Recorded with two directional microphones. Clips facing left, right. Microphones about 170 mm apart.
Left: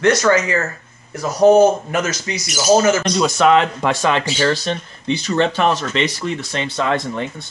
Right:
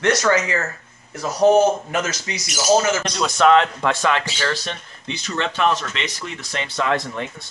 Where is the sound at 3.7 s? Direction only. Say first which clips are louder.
Left 2 dB; 20° left (ahead or behind).